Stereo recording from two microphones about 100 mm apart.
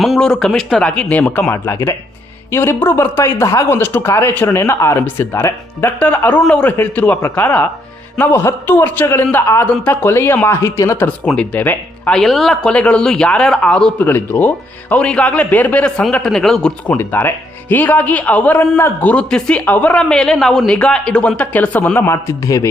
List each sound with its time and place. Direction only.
0.0 s speech: centre (ahead or behind)
1.6 s speech: 30° left (ahead or behind)
6.0 s a man's voice: 15° left (ahead or behind)
11.3 s speech: 15° left (ahead or behind)
12.1 s a man's voice: centre (ahead or behind)
17.0 s a man's voice: 25° left (ahead or behind)
18.8 s speech: 25° left (ahead or behind)
19.1 s a man's voice: 10° left (ahead or behind)
20.0 s a man's voice: 5° left (ahead or behind); by 22.7 s 30° left (ahead or behind)